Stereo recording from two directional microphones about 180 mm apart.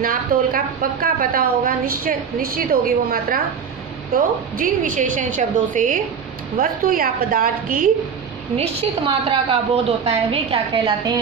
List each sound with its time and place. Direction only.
0.0 s a woman's voice: 50° right (ahead or behind)
4.6 s a woman's voice: 50° right (ahead or behind)
8.5 s a woman's voice: 30° right (ahead or behind)